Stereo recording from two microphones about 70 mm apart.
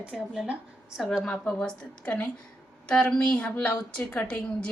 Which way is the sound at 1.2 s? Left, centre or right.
Centre.